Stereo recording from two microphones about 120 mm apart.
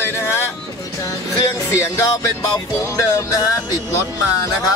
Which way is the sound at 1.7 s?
25° left (ahead or behind).